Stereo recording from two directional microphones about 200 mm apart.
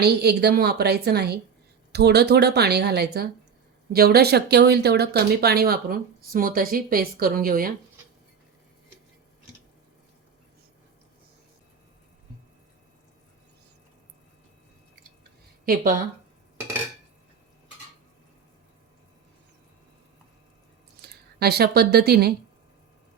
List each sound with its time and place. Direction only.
0.0 s speech: 55° right (ahead or behind)
15.6 s speech: 45° right (ahead or behind)
21.1 s speech: 50° right (ahead or behind)